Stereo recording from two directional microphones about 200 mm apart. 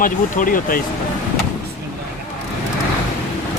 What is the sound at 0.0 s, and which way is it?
Speech, 45° left (ahead or behind).